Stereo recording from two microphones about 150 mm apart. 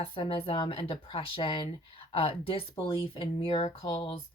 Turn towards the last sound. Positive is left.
turn(degrees=30)  # may be behind; listen again after turning